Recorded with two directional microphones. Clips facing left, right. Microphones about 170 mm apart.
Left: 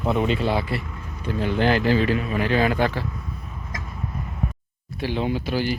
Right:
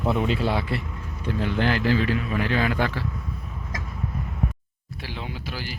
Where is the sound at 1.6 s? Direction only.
20° left (ahead or behind).